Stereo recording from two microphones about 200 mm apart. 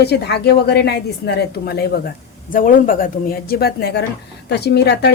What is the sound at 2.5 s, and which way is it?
A woman's voice, 45° left (ahead or behind).